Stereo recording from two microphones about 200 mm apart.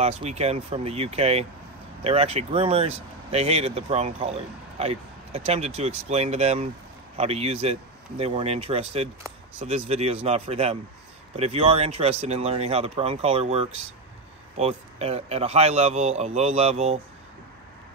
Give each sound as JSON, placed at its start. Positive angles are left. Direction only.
{"t": 0.0, "sound": "speech", "side_deg": -35}